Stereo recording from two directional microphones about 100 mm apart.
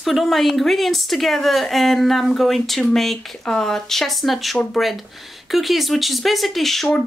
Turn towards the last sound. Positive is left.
turn(degrees=5)  # may be behind; listen again after turning